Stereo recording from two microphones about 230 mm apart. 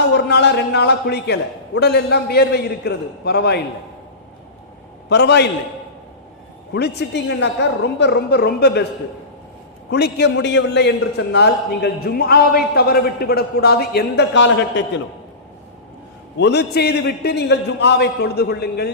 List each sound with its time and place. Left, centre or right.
0.0 s a man's voice: left
5.0 s a man's voice: left
6.7 s a man's voice: left
9.9 s a man's voice: left
16.4 s a man's voice: left